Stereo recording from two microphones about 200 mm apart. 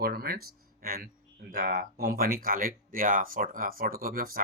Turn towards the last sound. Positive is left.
turn(degrees=-45)  # may be behind; listen again after turning